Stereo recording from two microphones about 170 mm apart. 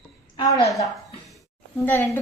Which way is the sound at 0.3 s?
20° left (ahead or behind).